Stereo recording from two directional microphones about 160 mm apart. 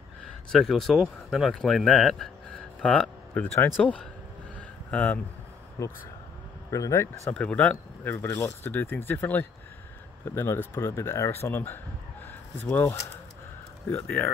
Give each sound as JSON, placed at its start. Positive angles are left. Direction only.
{"t": 0.2, "sound": "speech", "side_deg": 0}
{"t": 4.6, "sound": "a sound", "side_deg": 10}
{"t": 5.8, "sound": "speech", "side_deg": 20}
{"t": 7.3, "sound": "speech", "side_deg": 5}
{"t": 12.3, "sound": "a sound", "side_deg": 10}
{"t": 13.8, "sound": "speech", "side_deg": 10}